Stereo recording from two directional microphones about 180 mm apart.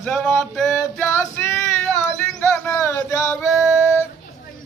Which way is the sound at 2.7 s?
15° left (ahead or behind).